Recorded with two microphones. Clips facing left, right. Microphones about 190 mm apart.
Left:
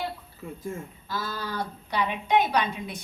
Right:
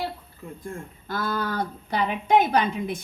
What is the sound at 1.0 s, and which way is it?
A woman's voice, 55° right (ahead or behind).